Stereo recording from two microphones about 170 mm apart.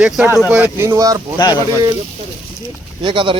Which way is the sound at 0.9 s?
20° right (ahead or behind).